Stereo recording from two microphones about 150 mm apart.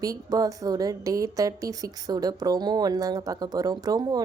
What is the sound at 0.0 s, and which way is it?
A woman's voice, 25° right (ahead or behind).